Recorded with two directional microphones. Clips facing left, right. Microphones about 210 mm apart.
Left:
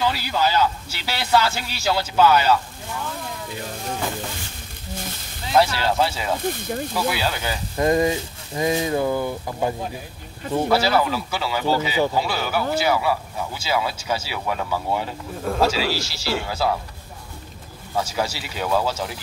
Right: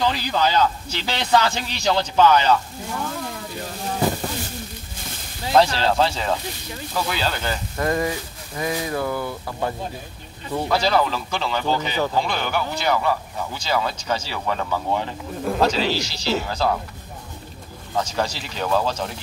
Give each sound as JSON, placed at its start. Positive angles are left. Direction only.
{"t": 0.0, "sound": "speech", "side_deg": 10}
{"t": 5.6, "sound": "speech", "side_deg": 10}
{"t": 6.4, "sound": "speech", "side_deg": 50}
{"t": 6.9, "sound": "speech", "side_deg": 10}
{"t": 7.8, "sound": "speech", "side_deg": 20}
{"t": 17.9, "sound": "speech", "side_deg": 5}